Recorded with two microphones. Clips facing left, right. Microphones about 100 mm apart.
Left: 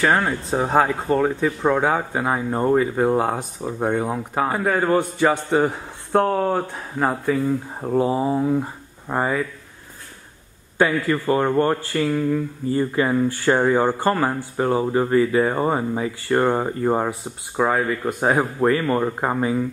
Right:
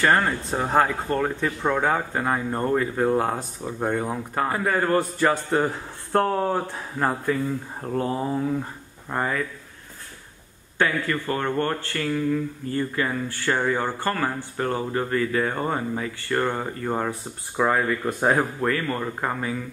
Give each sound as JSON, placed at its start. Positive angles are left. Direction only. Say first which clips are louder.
{"t": 0.0, "sound": "speech", "louder": "left 1 dB", "side_deg": 5}
{"t": 11.1, "sound": "speech", "louder": "left 6 dB", "side_deg": 15}
{"t": 13.8, "sound": "speech", "louder": "left 6 dB", "side_deg": 15}
{"t": 17.6, "sound": "speech", "louder": "left 2 dB", "side_deg": 5}
{"t": 18.6, "sound": "speech", "louder": "left 6 dB", "side_deg": 25}